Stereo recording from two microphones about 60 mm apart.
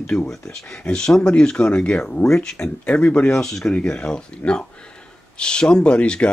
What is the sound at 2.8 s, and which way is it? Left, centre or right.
Speech, left.